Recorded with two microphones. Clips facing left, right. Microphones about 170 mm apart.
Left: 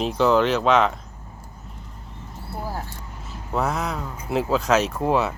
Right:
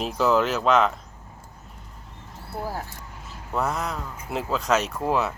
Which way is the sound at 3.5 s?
Centre (ahead or behind).